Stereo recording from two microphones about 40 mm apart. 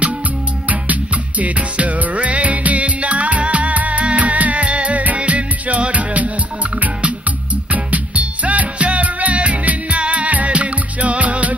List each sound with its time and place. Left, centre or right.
1.4 s music: right